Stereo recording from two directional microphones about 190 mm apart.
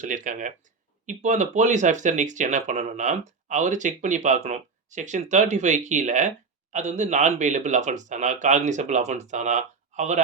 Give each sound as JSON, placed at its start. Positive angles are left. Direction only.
{"t": 0.0, "sound": "speech", "side_deg": -40}